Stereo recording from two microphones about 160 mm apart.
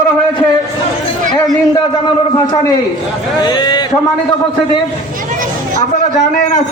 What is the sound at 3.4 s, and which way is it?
Speech, 25° left (ahead or behind).